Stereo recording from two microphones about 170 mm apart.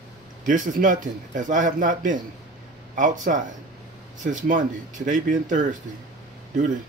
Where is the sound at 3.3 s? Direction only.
55° right (ahead or behind).